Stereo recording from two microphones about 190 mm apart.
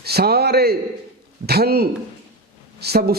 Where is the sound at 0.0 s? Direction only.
55° right (ahead or behind).